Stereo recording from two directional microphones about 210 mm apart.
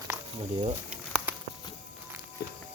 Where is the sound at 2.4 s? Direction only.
50° left (ahead or behind).